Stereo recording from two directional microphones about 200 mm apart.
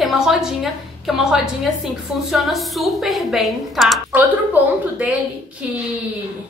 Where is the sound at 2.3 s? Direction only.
Centre (ahead or behind).